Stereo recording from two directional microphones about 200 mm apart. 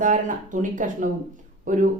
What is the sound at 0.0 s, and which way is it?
Speech, 40° right (ahead or behind).